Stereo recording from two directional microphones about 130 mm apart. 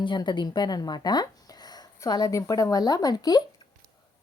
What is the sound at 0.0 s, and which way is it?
A woman's voice, 35° left (ahead or behind).